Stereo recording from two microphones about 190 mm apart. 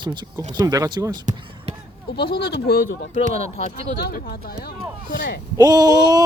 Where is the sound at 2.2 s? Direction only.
55° left (ahead or behind).